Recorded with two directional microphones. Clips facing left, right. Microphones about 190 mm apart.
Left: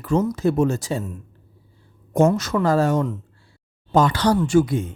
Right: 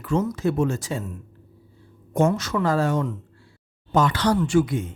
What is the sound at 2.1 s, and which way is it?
A man's voice, 40° left (ahead or behind).